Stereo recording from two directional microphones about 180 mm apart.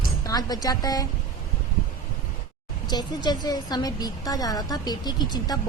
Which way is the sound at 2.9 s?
25° left (ahead or behind).